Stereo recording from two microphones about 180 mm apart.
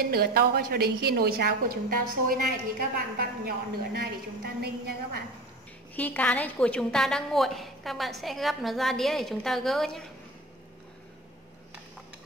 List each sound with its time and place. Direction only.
0.0 s a woman's voice: 60° right (ahead or behind)
5.9 s a woman's voice: 10° left (ahead or behind)